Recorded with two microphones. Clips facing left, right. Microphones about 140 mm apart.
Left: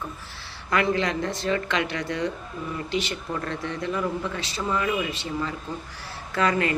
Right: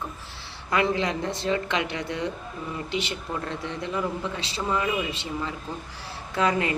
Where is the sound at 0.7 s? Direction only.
20° right (ahead or behind).